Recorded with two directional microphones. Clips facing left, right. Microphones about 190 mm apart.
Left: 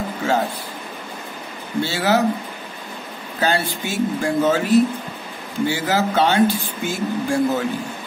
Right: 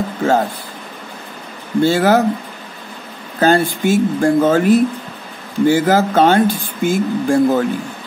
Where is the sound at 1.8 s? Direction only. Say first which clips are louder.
Right 6 dB; 50° right (ahead or behind).